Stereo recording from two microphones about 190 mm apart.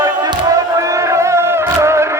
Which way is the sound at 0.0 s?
20° right (ahead or behind).